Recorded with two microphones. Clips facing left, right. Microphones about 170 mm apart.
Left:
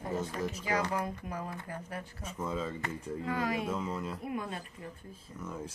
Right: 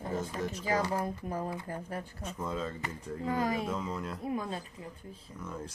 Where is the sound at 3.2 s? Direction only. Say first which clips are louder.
Right 2 dB; 30° right (ahead or behind).